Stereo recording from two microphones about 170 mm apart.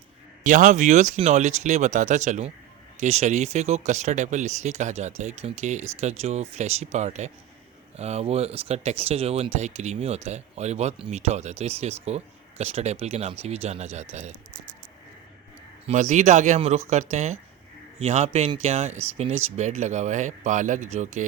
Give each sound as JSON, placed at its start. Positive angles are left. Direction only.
{"t": 0.4, "sound": "speech", "side_deg": -45}
{"t": 15.9, "sound": "speech", "side_deg": -45}